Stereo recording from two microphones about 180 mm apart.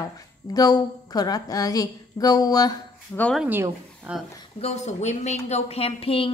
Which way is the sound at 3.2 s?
5° left (ahead or behind).